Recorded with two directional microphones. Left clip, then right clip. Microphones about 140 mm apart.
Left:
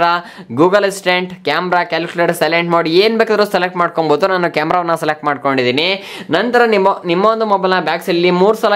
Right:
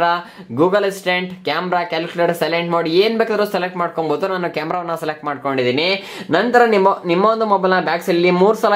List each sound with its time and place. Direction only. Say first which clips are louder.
0.0 s speech: left 3 dB; 35° left (ahead or behind)
5.8 s speech: left 2 dB; 15° left (ahead or behind)